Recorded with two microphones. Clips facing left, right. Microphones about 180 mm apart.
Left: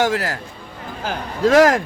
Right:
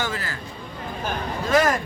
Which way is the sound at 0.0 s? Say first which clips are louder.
Left 9 dB; 80° left.